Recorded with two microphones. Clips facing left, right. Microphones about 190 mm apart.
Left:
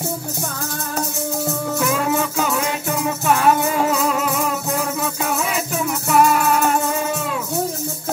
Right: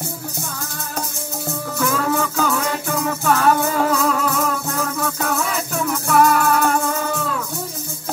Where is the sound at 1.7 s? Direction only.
20° left (ahead or behind).